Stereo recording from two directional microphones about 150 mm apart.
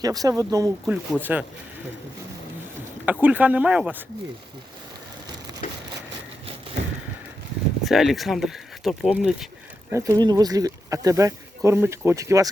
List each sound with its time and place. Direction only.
0.0 s speech: 25° right (ahead or behind)
0.9 s speech: 10° right (ahead or behind)
3.1 s speech: 10° right (ahead or behind)
7.9 s speech: centre (ahead or behind)
9.9 s speech: 20° right (ahead or behind)